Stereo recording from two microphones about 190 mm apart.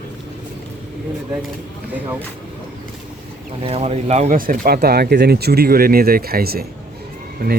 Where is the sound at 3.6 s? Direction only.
30° right (ahead or behind); by 6.7 s 55° right (ahead or behind).